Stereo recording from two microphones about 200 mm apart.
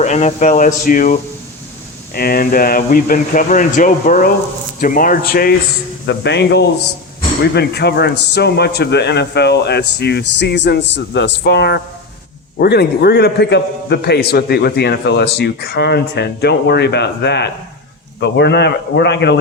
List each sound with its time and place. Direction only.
0.0 s a man's voice: 35° left (ahead or behind); by 19.4 s 60° left (ahead or behind)